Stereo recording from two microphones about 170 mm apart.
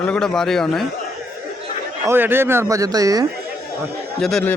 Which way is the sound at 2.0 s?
15° right (ahead or behind).